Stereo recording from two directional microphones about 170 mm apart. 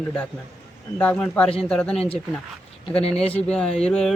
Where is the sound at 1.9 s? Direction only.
35° left (ahead or behind).